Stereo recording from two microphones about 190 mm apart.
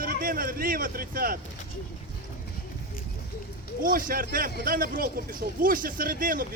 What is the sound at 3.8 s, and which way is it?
Speech, 50° right (ahead or behind).